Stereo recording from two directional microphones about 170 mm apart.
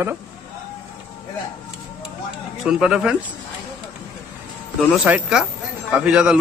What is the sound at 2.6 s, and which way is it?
Speech, 5° right (ahead or behind).